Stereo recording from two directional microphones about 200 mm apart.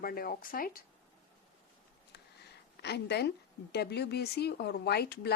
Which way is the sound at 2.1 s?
55° left (ahead or behind).